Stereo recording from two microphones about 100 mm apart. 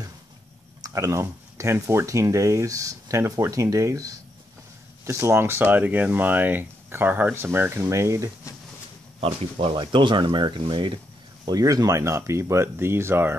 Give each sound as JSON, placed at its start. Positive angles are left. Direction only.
{"t": 0.8, "sound": "speech", "side_deg": -30}
{"t": 9.2, "sound": "speech", "side_deg": -75}
{"t": 9.8, "sound": "speech", "side_deg": -50}
{"t": 11.4, "sound": "speech", "side_deg": -40}